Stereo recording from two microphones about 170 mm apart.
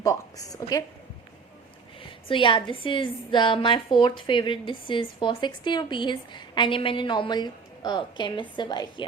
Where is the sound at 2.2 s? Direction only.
30° left (ahead or behind).